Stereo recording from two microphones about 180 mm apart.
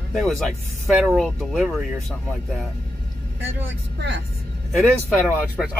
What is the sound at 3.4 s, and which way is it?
Speech, 90° right.